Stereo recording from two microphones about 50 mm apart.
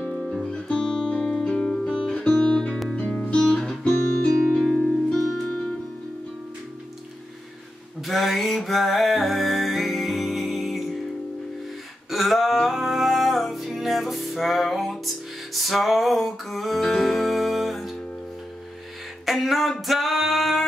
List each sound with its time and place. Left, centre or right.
0.0 s music: left
0.3 s music: centre
2.9 s guitar: centre
8.1 s music: centre
12.1 s music: centre
19.2 s a sound: centre
19.9 s singing: centre